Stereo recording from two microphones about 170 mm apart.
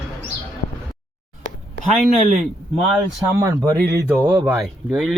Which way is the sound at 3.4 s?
20° right (ahead or behind).